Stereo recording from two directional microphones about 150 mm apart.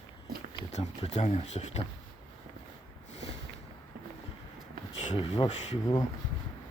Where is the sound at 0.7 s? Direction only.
45° left (ahead or behind).